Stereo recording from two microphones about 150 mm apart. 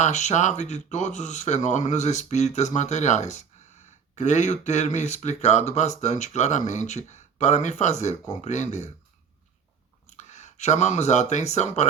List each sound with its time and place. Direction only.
0.0 s speech: 50° left (ahead or behind)
10.1 s speech: 50° left (ahead or behind)